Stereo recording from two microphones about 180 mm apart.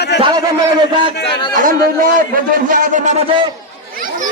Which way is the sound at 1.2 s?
25° left (ahead or behind).